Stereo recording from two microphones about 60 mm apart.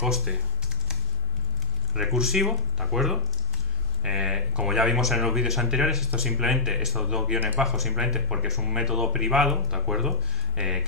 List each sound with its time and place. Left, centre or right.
0.0 s speech: centre
2.0 s speech: centre
7.3 s speech: right
7.6 s speech: centre